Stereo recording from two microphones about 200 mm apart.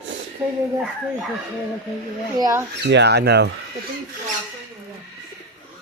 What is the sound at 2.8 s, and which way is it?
Speech, 60° right (ahead or behind).